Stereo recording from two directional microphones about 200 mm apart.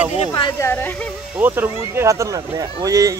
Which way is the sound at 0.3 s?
15° left (ahead or behind).